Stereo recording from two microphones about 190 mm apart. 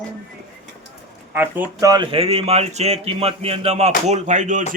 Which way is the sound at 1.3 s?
10° right (ahead or behind).